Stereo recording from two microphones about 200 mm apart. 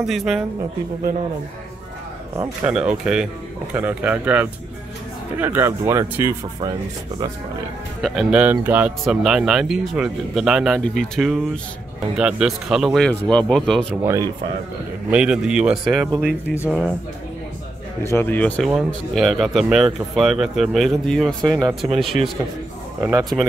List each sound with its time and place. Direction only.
0.0 s speech: centre (ahead or behind)
2.6 s speech: 5° right (ahead or behind)
8.0 s speech: 5° right (ahead or behind)
14.0 s speech: 15° right (ahead or behind)
15.0 s speech: 5° right (ahead or behind)
18.1 s speech: 10° left (ahead or behind)
21.5 s speech: 20° right (ahead or behind)
21.8 s speech: centre (ahead or behind)